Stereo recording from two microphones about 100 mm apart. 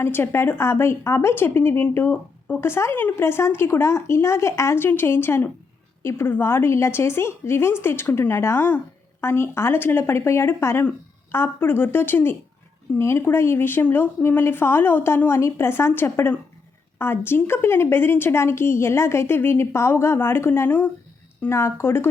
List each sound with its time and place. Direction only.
0.0 s speech: 25° left (ahead or behind)